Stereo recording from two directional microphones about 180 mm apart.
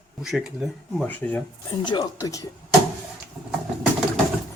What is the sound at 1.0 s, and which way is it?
Speech, 10° left (ahead or behind).